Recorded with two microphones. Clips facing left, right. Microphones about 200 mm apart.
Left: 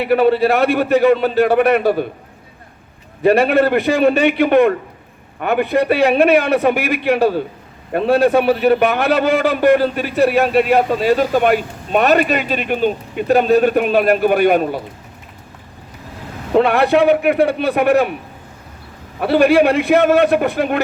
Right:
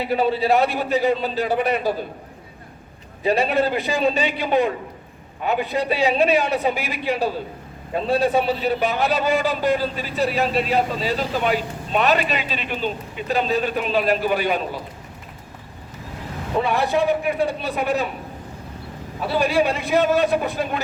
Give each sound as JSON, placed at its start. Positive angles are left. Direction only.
{"t": 0.0, "sound": "a man's voice", "side_deg": 65}
{"t": 3.2, "sound": "a man's voice", "side_deg": 70}
{"t": 16.5, "sound": "a man's voice", "side_deg": 70}
{"t": 19.2, "sound": "a man's voice", "side_deg": 65}